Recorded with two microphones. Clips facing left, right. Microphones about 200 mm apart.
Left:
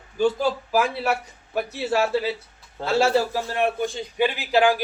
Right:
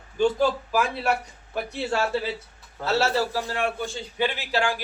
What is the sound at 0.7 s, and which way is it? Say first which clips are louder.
A man's voice: left 2 dB; 10° left (ahead or behind).